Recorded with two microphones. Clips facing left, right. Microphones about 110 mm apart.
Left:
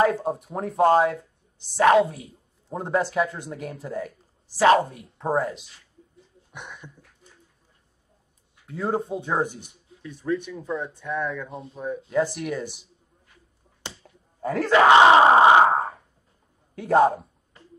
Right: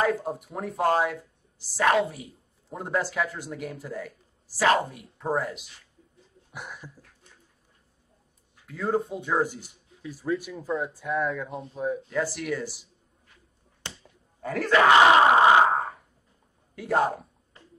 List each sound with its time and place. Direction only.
0.0 s speech: 25° left (ahead or behind)
6.5 s a sound: 5° right (ahead or behind)
8.6 s speech: 30° left (ahead or behind)
10.0 s speech: 5° right (ahead or behind)
12.1 s speech: 20° left (ahead or behind)
14.4 s speech: 25° left (ahead or behind)
16.7 s a sound: 25° left (ahead or behind)